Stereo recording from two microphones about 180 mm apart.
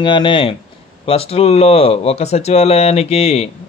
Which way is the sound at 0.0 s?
25° left (ahead or behind).